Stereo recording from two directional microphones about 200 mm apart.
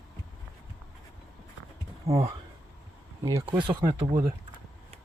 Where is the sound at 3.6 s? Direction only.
25° right (ahead or behind).